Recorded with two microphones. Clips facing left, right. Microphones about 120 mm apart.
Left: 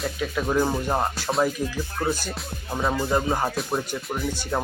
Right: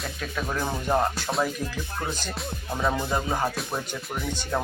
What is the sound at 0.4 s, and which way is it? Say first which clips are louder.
Speech: left 5 dB; 20° left (ahead or behind).